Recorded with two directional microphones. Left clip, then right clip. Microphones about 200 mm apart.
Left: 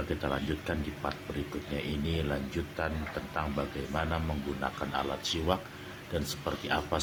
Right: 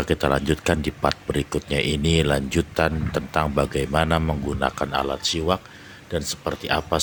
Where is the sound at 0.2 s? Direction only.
45° right (ahead or behind).